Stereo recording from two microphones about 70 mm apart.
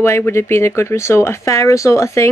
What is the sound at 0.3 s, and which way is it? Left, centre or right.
Speech, left.